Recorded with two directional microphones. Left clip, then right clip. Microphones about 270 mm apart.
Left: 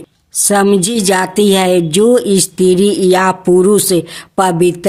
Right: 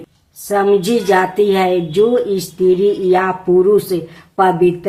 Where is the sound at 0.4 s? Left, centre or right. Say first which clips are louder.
Left 2 dB; left.